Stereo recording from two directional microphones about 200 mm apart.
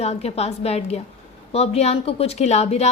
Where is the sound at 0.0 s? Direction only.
30° left (ahead or behind).